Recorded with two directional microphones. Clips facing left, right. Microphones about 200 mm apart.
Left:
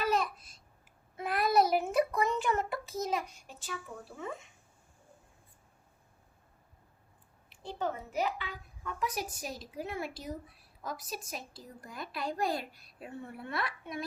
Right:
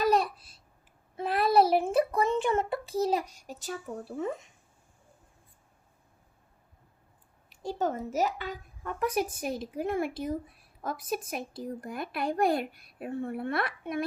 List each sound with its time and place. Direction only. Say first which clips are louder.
0.0 s babbling: right 5 dB; 35° right (ahead or behind)
1.1 s a sound: right 4 dB; 30° right (ahead or behind)
7.5 s speech: right 5 dB; 40° right (ahead or behind)